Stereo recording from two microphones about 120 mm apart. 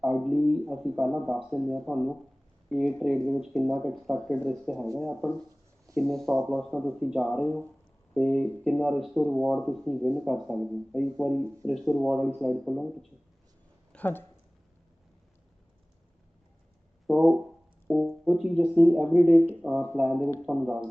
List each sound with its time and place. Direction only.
0.0 s speech: centre (ahead or behind)
8.3 s speech: 10° left (ahead or behind)
9.0 s speech: 5° right (ahead or behind)
13.9 s speech: 15° left (ahead or behind)
17.1 s speech: 5° right (ahead or behind)
19.6 s speech: 15° right (ahead or behind)
20.4 s speech: 5° right (ahead or behind)